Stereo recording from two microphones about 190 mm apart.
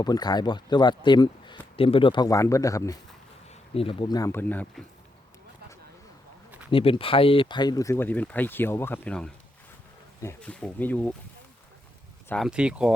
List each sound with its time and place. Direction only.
0.0 s speech: 20° left (ahead or behind)
3.8 s speech: 25° left (ahead or behind); by 4.8 s 10° left (ahead or behind)
6.7 s speech: 25° left (ahead or behind); by 11.1 s 10° left (ahead or behind)
12.3 s speech: centre (ahead or behind)